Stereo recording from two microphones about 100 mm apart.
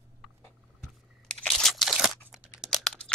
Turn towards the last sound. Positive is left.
turn(degrees=5)  # may be behind; listen again after turning